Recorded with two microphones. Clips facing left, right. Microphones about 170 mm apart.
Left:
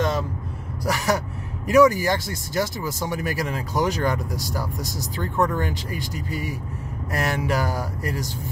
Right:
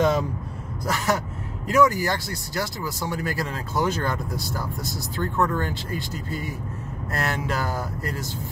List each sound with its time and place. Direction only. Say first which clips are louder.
0.8 s speech: left 2 dB; 15° left (ahead or behind)